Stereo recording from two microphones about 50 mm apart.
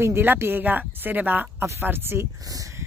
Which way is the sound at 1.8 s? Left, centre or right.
Right.